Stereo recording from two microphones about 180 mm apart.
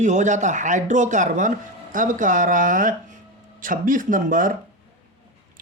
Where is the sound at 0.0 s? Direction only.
40° right (ahead or behind).